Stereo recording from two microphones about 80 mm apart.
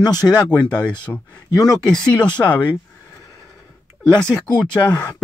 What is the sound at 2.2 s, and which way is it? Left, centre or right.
Speech, left.